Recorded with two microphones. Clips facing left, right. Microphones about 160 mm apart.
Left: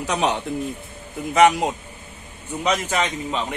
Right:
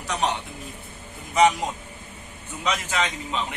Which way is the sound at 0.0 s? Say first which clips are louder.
Left 4 dB; 70° left (ahead or behind).